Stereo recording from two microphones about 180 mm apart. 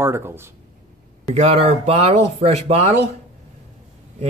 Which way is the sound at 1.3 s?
35° right (ahead or behind).